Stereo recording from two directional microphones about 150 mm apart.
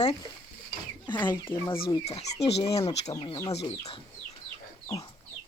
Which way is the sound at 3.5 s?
40° left (ahead or behind).